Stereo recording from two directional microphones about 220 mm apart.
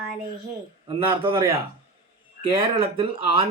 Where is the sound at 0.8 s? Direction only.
25° right (ahead or behind).